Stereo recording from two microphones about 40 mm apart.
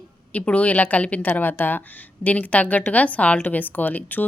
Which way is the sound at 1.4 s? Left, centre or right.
Left.